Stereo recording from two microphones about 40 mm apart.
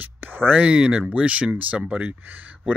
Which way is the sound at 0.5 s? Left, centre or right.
Right.